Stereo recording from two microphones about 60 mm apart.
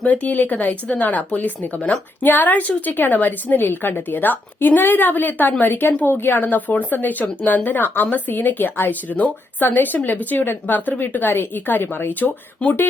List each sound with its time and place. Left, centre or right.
0.0 s a woman's voice: left